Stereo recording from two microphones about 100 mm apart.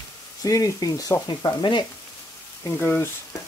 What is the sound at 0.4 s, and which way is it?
Frying, 35° left (ahead or behind).